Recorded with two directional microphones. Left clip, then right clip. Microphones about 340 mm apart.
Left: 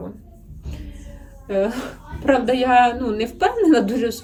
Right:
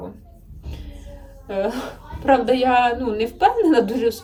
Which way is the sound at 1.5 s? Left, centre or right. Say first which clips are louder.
Left 2 dB; centre.